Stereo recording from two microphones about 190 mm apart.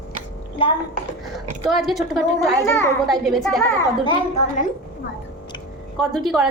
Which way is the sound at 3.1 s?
Centre (ahead or behind).